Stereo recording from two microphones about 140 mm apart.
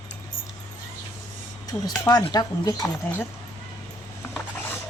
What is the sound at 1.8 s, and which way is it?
Speech, 25° left (ahead or behind).